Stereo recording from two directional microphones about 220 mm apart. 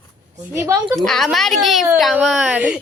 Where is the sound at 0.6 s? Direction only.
15° right (ahead or behind).